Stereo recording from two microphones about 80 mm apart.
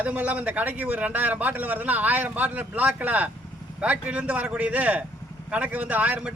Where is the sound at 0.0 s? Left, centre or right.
Centre.